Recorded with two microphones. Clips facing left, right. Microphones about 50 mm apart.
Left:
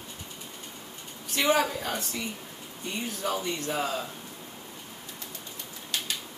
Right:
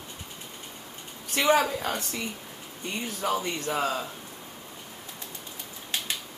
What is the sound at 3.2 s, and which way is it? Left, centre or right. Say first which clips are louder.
Speech: right 3 dB; right.